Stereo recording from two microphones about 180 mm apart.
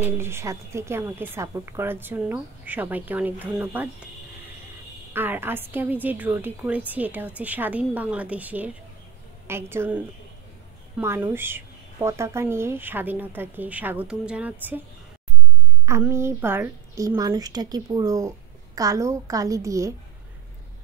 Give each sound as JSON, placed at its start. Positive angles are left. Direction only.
{"t": 0.0, "sound": "a woman's voice", "side_deg": -15}
{"t": 5.1, "sound": "a woman's voice", "side_deg": -10}
{"t": 15.8, "sound": "a woman's voice", "side_deg": -15}